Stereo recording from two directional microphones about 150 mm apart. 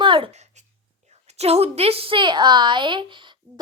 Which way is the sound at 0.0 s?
35° right (ahead or behind).